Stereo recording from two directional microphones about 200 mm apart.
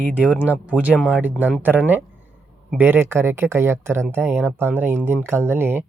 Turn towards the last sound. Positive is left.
turn(degrees=-10)  # may be behind; listen again after turning